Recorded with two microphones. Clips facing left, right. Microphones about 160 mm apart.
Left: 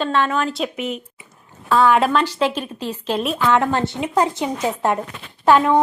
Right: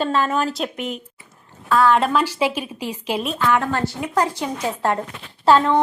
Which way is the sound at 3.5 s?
20° left (ahead or behind).